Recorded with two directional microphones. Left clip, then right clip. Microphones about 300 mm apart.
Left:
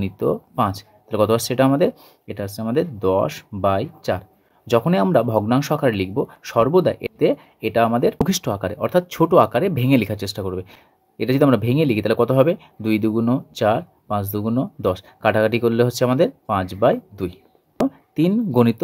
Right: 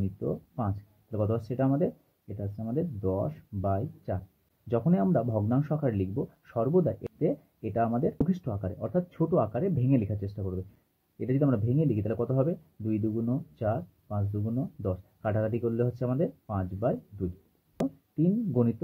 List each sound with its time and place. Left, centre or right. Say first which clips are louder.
0.2 s speech: left 15 dB; left